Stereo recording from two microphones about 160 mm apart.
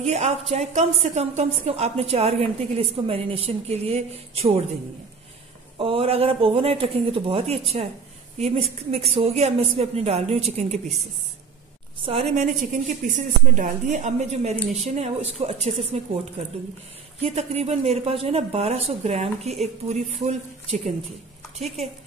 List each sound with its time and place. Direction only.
0.0 s a woman's voice: 40° right (ahead or behind)
5.8 s a woman's voice: 35° right (ahead or behind)
12.0 s a woman's voice: 35° right (ahead or behind)
12.7 s a woman's voice: 50° right (ahead or behind)
17.2 s a woman's voice: 40° right (ahead or behind)